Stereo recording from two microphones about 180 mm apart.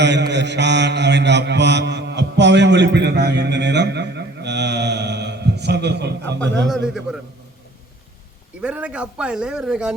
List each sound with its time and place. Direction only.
0.0 s mantra: 75° right (ahead or behind)
6.7 s speech: centre (ahead or behind)
8.6 s speech: 5° right (ahead or behind)